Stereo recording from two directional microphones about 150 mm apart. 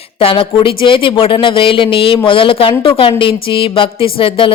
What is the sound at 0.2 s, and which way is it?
Speech, 35° left (ahead or behind).